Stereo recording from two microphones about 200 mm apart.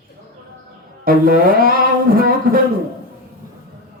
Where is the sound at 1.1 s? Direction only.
45° right (ahead or behind).